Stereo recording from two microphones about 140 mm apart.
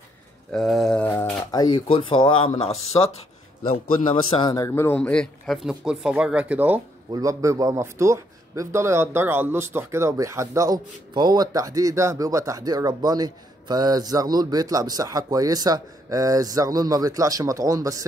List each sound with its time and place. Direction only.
0.5 s a sound: centre (ahead or behind)
1.5 s speech: 30° left (ahead or behind); by 3.2 s 45° left (ahead or behind)
4.1 s a man's voice: 35° left (ahead or behind); by 6.8 s 10° right (ahead or behind)
7.1 s a man's voice: 25° right (ahead or behind)